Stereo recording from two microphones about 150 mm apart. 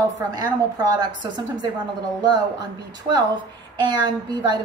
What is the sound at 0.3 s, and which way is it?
A woman's voice, 25° right (ahead or behind).